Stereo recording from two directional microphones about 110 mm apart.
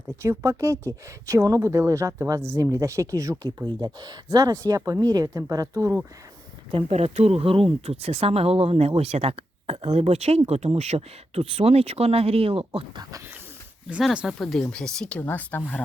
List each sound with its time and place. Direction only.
0.2 s speech: 30° right (ahead or behind)
6.7 s speech: 55° right (ahead or behind)
6.9 s speech: 70° right (ahead or behind)
13.0 s speech: 30° right (ahead or behind)
13.8 s speech: 5° right (ahead or behind); by 15.8 s 10° left (ahead or behind)